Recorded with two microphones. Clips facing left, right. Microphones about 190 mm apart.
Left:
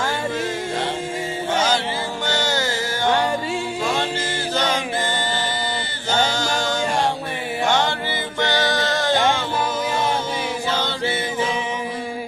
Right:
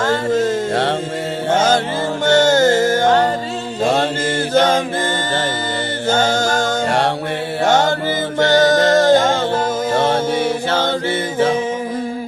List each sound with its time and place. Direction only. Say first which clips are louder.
1.5 s music: right 6 dB; 50° right (ahead or behind)
4.5 s chant: right 9 dB; 50° right (ahead or behind)
6.1 s music: right 5 dB; 45° right (ahead or behind)
7.6 s mantra: right 6 dB; 45° right (ahead or behind)
8.4 s music: right 9 dB; 45° right (ahead or behind)
9.9 s music: right 9 dB; 70° right (ahead or behind)
10.3 s music: right 7 dB; 50° right (ahead or behind)